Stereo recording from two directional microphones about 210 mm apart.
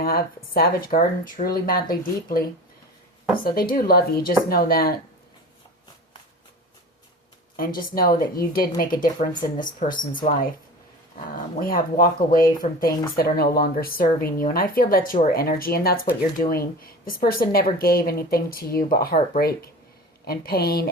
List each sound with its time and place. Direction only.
0.0 s speech: 45° left (ahead or behind)
3.4 s speech: 45° left (ahead or behind)
7.5 s speech: 45° left (ahead or behind)
11.6 s speech: 45° left (ahead or behind)